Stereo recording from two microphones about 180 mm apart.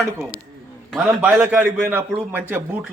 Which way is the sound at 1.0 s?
10° right (ahead or behind).